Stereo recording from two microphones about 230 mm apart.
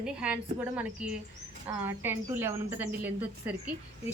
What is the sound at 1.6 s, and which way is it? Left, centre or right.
Speech, centre.